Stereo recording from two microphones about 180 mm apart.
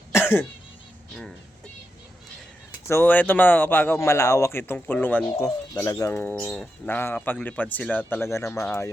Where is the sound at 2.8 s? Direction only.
15° left (ahead or behind).